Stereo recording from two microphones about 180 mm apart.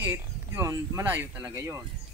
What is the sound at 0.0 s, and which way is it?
Speech, 10° right (ahead or behind).